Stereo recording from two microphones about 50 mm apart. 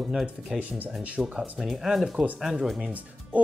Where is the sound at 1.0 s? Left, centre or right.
Right.